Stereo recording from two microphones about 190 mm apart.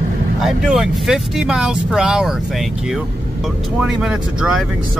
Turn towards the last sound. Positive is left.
turn(degrees=-5)  # may be behind; listen again after turning